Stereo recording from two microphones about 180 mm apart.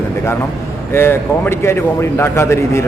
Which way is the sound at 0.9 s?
15° left (ahead or behind).